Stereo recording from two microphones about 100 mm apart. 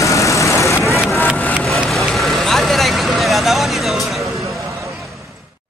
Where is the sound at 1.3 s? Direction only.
15° left (ahead or behind).